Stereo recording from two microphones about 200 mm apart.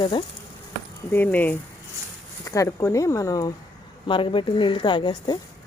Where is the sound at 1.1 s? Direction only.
10° left (ahead or behind).